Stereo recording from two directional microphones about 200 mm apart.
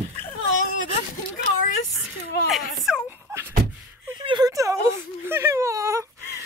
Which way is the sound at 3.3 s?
15° right (ahead or behind).